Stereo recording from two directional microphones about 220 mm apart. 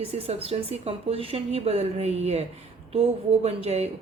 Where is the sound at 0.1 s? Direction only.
25° right (ahead or behind).